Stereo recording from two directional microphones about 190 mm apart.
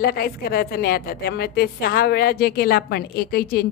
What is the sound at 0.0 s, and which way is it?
A woman's voice, 55° left (ahead or behind).